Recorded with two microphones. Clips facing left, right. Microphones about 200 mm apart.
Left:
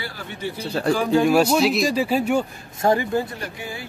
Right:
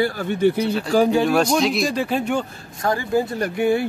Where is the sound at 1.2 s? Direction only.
5° left (ahead or behind).